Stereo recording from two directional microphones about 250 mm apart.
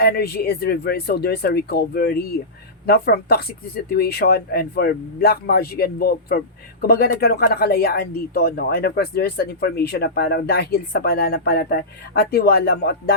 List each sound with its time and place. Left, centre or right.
0.0 s speech: left